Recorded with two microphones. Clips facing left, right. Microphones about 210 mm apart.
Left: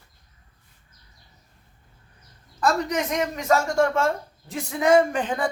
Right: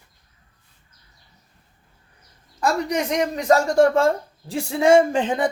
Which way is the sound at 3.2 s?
35° right (ahead or behind).